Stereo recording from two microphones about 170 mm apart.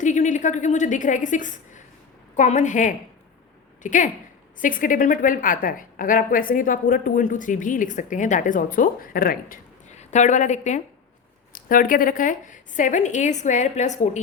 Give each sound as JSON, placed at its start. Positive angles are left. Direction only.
{"t": 0.0, "sound": "a woman's voice", "side_deg": 45}
{"t": 9.9, "sound": "a woman's voice", "side_deg": 45}
{"t": 11.5, "sound": "a woman's voice", "side_deg": 55}